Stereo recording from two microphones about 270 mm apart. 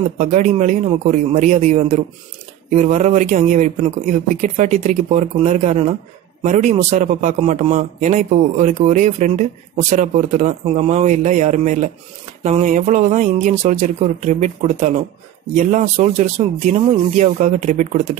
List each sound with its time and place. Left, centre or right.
0.2 s a man's voice: right